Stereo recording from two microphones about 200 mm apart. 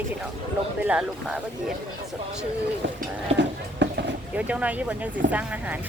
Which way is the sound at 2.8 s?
65° right (ahead or behind).